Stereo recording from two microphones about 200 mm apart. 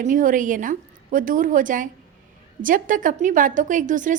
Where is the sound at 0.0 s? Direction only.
40° right (ahead or behind).